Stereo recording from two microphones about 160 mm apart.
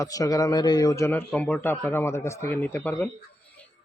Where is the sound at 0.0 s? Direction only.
20° left (ahead or behind).